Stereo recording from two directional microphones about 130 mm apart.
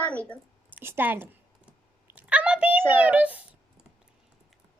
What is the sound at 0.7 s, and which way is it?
Speech, 15° right (ahead or behind).